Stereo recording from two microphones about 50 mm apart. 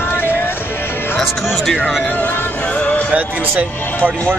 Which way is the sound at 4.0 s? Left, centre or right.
Left.